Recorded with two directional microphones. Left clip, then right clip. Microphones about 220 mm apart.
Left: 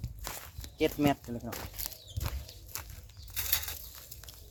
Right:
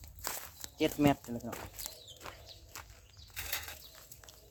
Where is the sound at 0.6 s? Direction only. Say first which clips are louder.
Left 3 dB; 10° right (ahead or behind).